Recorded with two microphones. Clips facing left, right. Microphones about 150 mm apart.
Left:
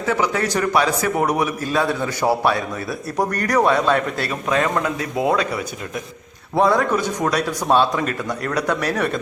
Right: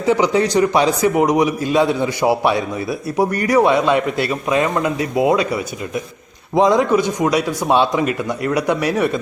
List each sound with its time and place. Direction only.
0.0 s a man's voice: 20° right (ahead or behind)